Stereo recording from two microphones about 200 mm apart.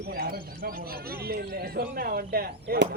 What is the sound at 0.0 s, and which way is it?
A man's voice, 50° right (ahead or behind).